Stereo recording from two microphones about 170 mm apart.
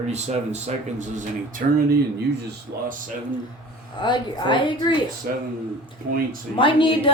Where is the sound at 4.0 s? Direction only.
25° left (ahead or behind).